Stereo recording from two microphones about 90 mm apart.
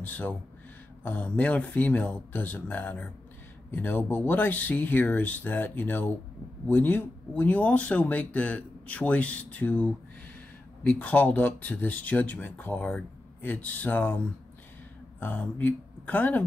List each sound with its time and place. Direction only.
0.0 s speech: 20° left (ahead or behind)